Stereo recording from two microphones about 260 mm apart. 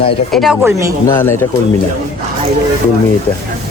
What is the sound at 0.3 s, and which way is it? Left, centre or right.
Speech, centre.